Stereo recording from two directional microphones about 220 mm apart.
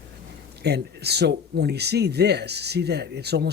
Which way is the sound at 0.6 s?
50° right (ahead or behind).